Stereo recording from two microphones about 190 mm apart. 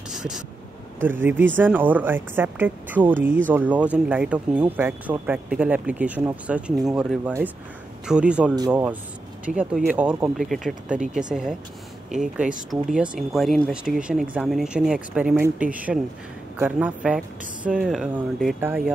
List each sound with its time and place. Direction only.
0.1 s vehicle: 5° right (ahead or behind)
1.0 s speech: 10° right (ahead or behind)
8.5 s speech: 20° right (ahead or behind)
9.5 s speech: 5° right (ahead or behind)